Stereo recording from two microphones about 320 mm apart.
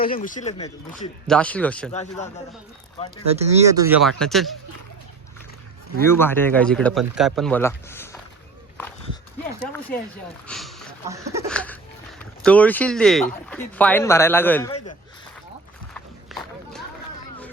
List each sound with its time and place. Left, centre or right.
0.0 s speech: left
1.3 s speech: centre
1.9 s speech: left
3.3 s speech: centre
6.1 s speech: centre
10.4 s a sound: centre
11.1 s a sound: centre
11.4 s a sound: centre
12.2 s speech: centre
16.0 s run: centre